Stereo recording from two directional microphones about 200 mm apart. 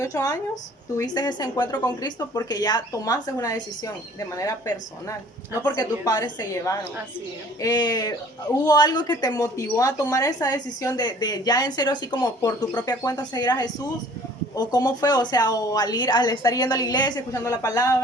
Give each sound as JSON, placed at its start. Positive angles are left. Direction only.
{"t": 0.0, "sound": "speech", "side_deg": 15}